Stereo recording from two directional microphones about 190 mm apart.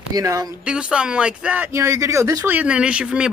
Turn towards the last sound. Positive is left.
turn(degrees=-5)  # may be behind; listen again after turning